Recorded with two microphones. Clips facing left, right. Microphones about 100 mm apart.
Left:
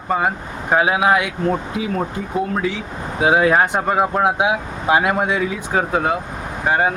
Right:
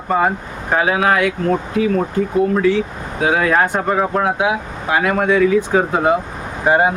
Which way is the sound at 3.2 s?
20° left (ahead or behind).